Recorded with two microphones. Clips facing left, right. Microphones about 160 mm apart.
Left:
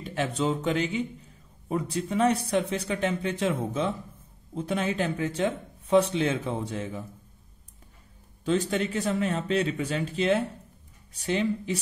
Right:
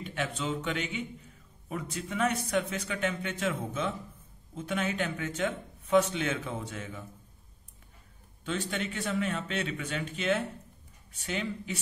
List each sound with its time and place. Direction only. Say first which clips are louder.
0.0 s speech: left 6 dB; 35° left (ahead or behind)
8.5 s speech: left 8 dB; 40° left (ahead or behind)